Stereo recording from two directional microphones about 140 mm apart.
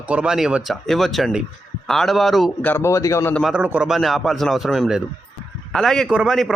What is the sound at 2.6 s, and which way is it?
Speech, 15° left (ahead or behind).